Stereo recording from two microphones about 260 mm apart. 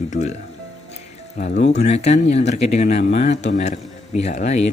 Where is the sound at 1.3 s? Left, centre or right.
Left.